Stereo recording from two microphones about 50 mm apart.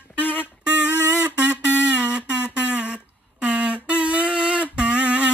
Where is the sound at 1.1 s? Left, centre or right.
Right.